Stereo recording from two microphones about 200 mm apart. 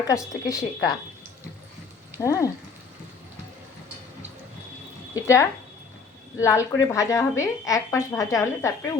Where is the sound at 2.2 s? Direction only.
15° left (ahead or behind).